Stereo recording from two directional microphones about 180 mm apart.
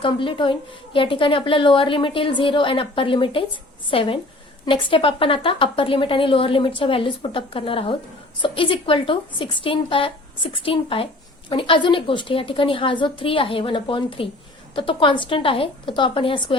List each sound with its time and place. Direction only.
0.0 s a woman's voice: 30° left (ahead or behind)